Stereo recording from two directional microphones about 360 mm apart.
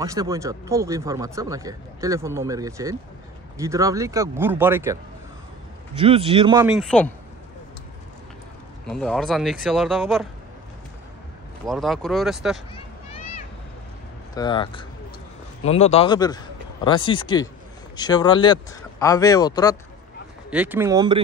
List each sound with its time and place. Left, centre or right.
0.0 s speech: centre
5.9 s speech: centre
8.8 s speech: centre
11.6 s speech: centre
12.7 s a sound: centre
14.3 s a man's voice: centre
20.4 s speech: centre